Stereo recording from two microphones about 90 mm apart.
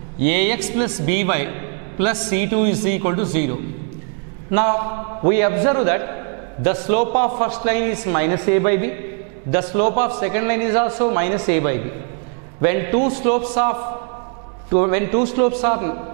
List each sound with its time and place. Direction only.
0.2 s a man's voice: 10° right (ahead or behind)